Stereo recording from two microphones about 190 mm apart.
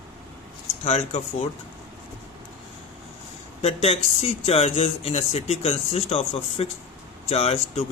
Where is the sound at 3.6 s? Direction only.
30° left (ahead or behind).